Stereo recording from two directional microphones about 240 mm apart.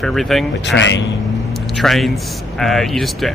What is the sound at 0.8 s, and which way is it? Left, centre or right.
Speech, left.